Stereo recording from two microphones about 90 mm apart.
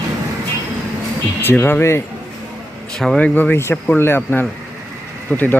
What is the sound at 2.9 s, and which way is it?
Speech, 5° left (ahead or behind).